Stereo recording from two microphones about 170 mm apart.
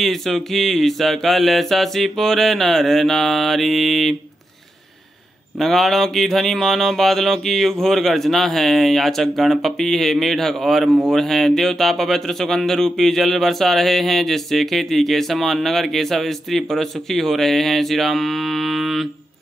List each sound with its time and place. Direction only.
0.0 s a man's voice: centre (ahead or behind)
5.6 s a man's voice: centre (ahead or behind)